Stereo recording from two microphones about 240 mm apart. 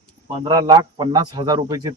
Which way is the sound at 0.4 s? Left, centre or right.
Centre.